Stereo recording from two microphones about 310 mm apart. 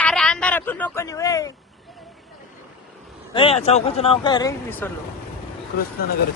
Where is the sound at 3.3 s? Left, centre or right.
Centre.